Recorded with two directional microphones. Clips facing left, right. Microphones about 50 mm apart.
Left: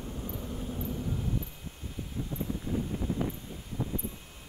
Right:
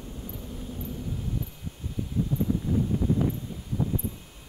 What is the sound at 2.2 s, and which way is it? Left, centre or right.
Wind, centre.